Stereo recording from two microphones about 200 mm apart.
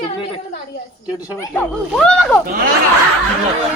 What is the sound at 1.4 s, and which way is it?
Speech, 5° left (ahead or behind).